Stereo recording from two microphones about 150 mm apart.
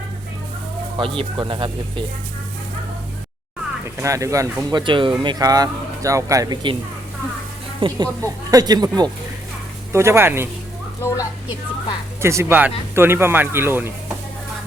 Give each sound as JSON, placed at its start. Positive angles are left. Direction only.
{"t": 0.9, "sound": "speech", "side_deg": -35}
{"t": 3.8, "sound": "speech", "side_deg": -20}
{"t": 4.8, "sound": "speech", "side_deg": -35}
{"t": 7.8, "sound": "speech", "side_deg": -30}
{"t": 12.2, "sound": "speech", "side_deg": -15}